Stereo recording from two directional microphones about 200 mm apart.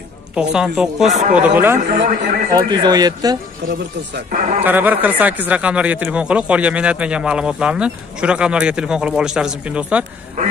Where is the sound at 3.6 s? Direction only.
50° right (ahead or behind).